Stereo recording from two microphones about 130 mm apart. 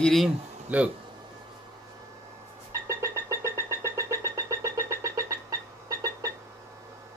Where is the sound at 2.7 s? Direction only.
20° right (ahead or behind).